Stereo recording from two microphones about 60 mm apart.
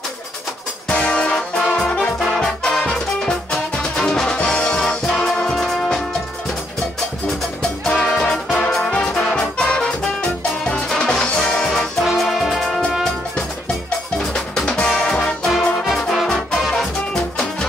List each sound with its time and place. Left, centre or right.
0.8 s music: centre
2.1 s music: centre
7.9 s music: left
8.7 s music: centre
14.3 s music: centre
15.5 s music: centre
17.1 s music: centre